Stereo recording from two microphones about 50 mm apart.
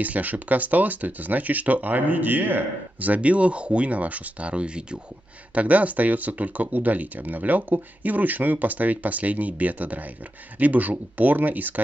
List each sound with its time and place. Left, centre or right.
0.0 s speech: right